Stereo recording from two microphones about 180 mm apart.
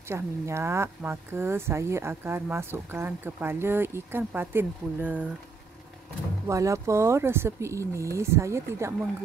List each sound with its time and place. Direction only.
0.1 s speech: 15° right (ahead or behind)
6.4 s speech: 15° right (ahead or behind)